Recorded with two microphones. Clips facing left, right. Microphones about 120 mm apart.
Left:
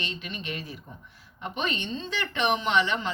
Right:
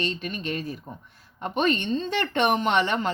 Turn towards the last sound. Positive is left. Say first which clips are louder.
# right 3 dB
turn(degrees=-50)  # may be behind; listen again after turning